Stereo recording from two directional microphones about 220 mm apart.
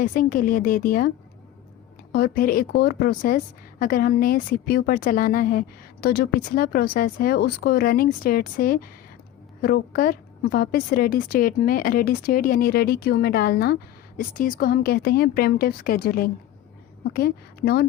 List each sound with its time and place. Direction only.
0.0 s a woman's voice: 40° left (ahead or behind)
2.1 s a woman's voice: 45° left (ahead or behind)